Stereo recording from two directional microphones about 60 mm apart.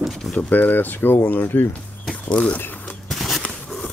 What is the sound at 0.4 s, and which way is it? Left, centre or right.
Speech, left.